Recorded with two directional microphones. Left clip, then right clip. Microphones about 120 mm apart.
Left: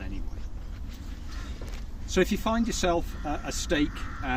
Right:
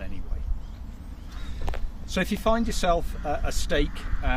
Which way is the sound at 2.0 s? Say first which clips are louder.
Right 1 dB; 35° right (ahead or behind).